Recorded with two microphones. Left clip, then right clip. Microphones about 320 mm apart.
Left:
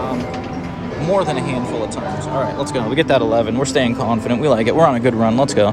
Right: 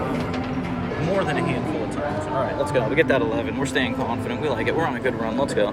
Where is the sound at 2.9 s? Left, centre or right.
Left.